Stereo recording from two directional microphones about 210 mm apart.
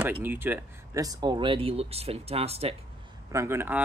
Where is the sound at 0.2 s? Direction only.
10° right (ahead or behind); by 2.7 s 30° right (ahead or behind).